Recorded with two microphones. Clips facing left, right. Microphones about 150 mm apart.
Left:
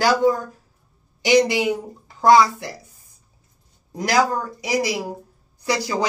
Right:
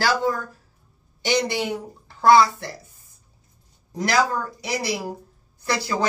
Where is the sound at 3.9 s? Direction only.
10° left (ahead or behind).